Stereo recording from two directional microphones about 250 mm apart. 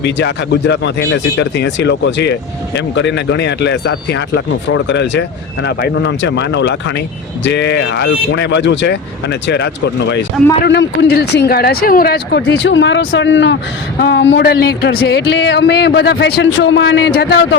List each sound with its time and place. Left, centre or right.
0.0 s speech: left